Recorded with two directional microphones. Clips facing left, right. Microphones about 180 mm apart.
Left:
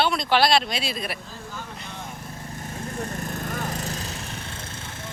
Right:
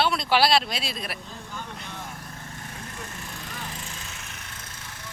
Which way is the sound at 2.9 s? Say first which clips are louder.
Left 9 dB; 40° left (ahead or behind).